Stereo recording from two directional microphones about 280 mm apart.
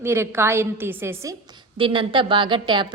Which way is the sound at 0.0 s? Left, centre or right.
Centre.